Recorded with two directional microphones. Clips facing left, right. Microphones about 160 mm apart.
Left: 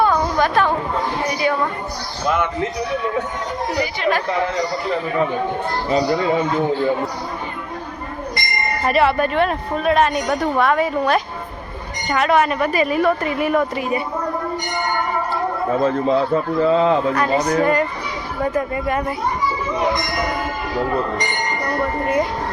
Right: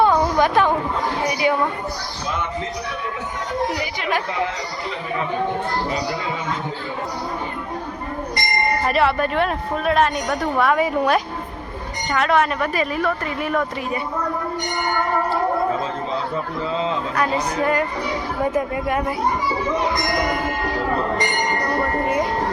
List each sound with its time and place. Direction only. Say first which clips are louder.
0.0 s chatter: right 1 dB; 15° right (ahead or behind)
1.3 s a woman's voice: right 1 dB; 15° right (ahead or behind)
8.9 s speech: left 5 dB; centre (ahead or behind)
12.1 s a woman's voice: left 2 dB; 5° left (ahead or behind)
15.8 s a man's voice: left 8 dB; 60° left (ahead or behind)
17.2 s speech: left 4 dB; 5° right (ahead or behind)